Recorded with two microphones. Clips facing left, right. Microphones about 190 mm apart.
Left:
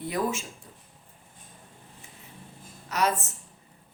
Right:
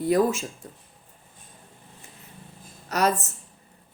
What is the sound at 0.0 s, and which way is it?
Speech, 40° right (ahead or behind).